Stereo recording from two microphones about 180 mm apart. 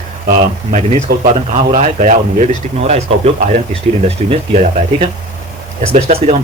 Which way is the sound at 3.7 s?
35° right (ahead or behind).